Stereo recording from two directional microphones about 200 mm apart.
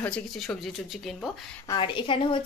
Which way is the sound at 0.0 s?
5° left (ahead or behind).